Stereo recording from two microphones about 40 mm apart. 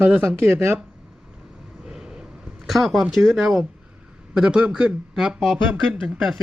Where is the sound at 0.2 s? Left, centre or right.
Right.